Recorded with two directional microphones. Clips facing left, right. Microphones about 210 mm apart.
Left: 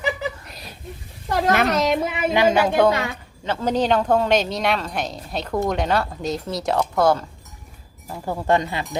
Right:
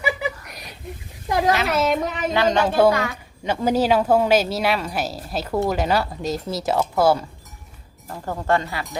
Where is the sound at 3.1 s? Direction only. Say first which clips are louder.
Right 2 dB; 15° right (ahead or behind).